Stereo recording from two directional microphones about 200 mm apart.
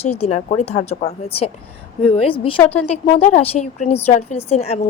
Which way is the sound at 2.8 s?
30° left (ahead or behind).